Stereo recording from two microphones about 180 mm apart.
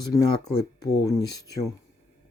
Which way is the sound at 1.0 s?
20° left (ahead or behind).